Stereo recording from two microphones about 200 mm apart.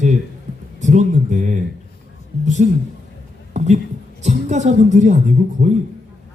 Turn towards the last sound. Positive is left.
turn(degrees=-40)  # may be behind; listen again after turning